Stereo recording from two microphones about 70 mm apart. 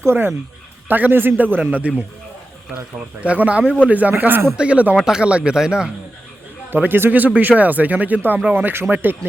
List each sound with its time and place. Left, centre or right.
0.0 s speech: right
3.2 s speech: centre
4.5 s speech: centre
6.7 s speech: right